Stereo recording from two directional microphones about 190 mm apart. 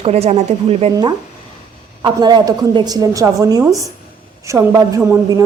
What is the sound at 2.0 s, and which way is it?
A woman's voice, 20° right (ahead or behind).